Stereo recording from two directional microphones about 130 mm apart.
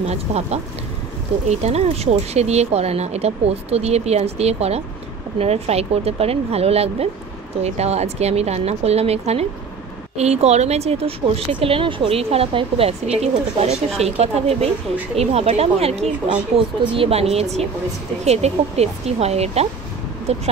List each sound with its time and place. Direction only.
0.0 s speech: 55° right (ahead or behind)